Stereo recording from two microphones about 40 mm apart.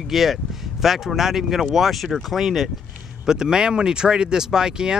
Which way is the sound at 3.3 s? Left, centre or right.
Centre.